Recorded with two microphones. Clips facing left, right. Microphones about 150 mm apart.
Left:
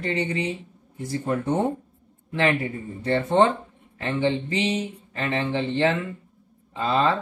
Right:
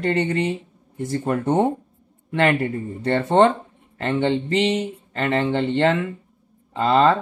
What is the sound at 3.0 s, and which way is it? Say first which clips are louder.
Speech: right 3 dB; 70° right (ahead or behind).